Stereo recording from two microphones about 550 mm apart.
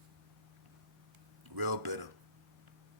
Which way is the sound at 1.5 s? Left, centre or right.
Right.